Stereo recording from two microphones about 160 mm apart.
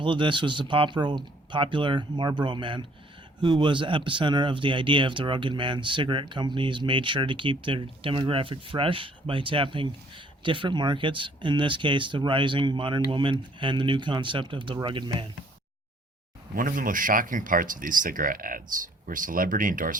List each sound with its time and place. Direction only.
0.0 s speech: 30° right (ahead or behind)
16.6 s speech: 60° right (ahead or behind)